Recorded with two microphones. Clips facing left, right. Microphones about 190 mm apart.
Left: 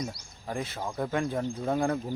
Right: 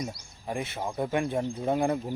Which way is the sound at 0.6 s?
25° right (ahead or behind).